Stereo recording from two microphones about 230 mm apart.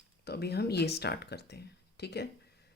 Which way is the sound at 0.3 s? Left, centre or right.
Left.